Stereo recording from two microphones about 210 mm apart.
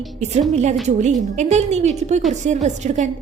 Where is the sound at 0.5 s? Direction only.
35° right (ahead or behind).